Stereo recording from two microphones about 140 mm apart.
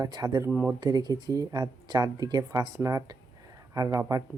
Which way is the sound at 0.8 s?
30° right (ahead or behind).